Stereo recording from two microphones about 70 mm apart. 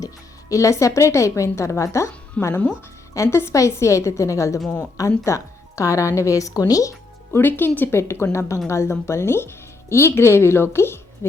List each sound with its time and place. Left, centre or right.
0.5 s speech: left
7.3 s a woman's voice: left